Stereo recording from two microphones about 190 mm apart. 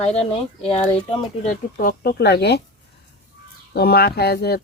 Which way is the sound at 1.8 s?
50° left (ahead or behind).